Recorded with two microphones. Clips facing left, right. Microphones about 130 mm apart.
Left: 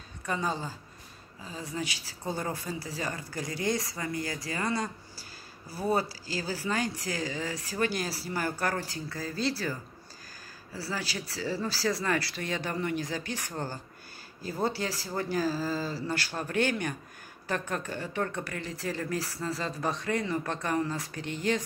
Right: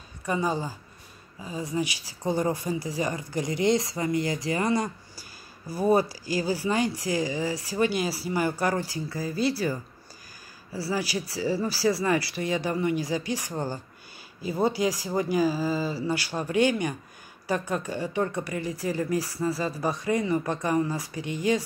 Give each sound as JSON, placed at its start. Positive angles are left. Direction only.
{"t": 0.2, "sound": "speech", "side_deg": -10}